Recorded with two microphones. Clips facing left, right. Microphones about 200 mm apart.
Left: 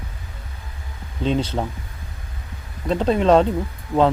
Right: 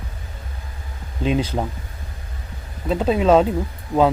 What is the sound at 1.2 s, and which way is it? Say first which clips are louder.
Speech: right 1 dB; 10° right (ahead or behind).